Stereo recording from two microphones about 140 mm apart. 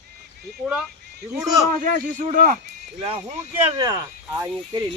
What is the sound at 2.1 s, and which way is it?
Speech, 70° right (ahead or behind).